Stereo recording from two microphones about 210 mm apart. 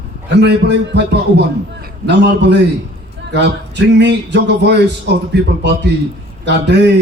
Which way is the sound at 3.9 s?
55° right (ahead or behind).